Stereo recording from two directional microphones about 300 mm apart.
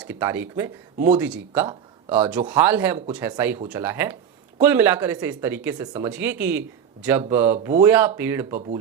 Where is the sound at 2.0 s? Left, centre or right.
Centre.